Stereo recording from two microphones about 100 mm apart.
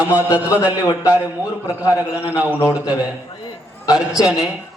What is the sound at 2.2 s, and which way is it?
A man's voice, 15° right (ahead or behind).